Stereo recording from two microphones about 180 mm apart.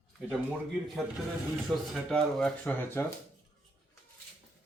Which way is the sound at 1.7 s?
Centre (ahead or behind).